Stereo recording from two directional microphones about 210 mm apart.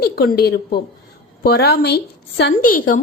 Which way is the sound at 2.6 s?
40° left (ahead or behind).